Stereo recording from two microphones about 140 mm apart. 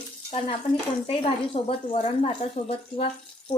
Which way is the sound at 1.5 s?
40° left (ahead or behind).